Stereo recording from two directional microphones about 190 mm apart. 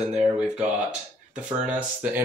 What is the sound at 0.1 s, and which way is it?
Speech, 5° right (ahead or behind).